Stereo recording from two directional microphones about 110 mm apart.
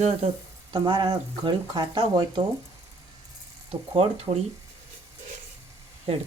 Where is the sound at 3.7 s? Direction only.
65° right (ahead or behind).